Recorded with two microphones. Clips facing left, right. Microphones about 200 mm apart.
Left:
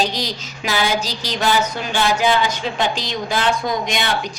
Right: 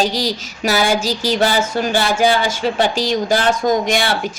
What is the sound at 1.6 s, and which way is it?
Speech, 45° right (ahead or behind).